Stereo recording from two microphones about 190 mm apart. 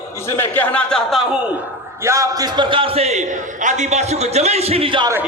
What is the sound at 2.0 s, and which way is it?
A man's voice, 15° right (ahead or behind).